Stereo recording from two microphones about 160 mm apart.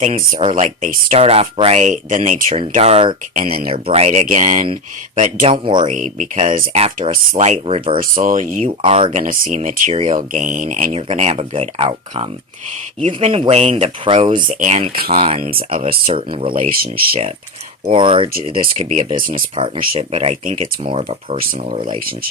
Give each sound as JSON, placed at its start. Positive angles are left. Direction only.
{"t": 0.0, "sound": "speech", "side_deg": -45}
{"t": 5.5, "sound": "speech", "side_deg": -35}
{"t": 5.9, "sound": "speech", "side_deg": -55}
{"t": 6.7, "sound": "speech", "side_deg": -40}
{"t": 7.9, "sound": "speech", "side_deg": -55}
{"t": 8.6, "sound": "speech", "side_deg": -35}
{"t": 9.1, "sound": "speech", "side_deg": -55}
{"t": 9.9, "sound": "speech", "side_deg": -40}
{"t": 10.9, "sound": "speech", "side_deg": -40}
{"t": 14.3, "sound": "speech", "side_deg": -55}
{"t": 19.1, "sound": "speech", "side_deg": -60}
{"t": 19.5, "sound": "speech", "side_deg": -35}